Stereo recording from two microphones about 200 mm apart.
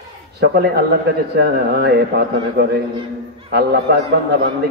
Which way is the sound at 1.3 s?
55° right (ahead or behind).